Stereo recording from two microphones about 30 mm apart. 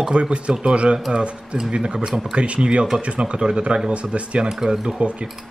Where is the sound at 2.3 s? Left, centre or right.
Right.